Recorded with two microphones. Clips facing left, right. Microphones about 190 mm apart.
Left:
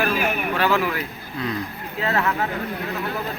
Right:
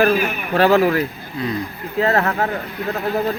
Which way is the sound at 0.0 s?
40° right (ahead or behind).